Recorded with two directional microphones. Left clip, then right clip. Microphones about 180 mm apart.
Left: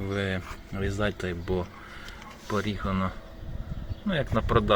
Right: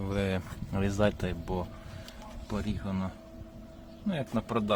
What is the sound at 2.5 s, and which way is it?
Speech, 10° right (ahead or behind).